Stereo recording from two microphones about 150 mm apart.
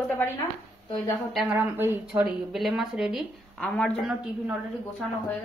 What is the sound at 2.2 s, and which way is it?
A woman's voice, centre (ahead or behind).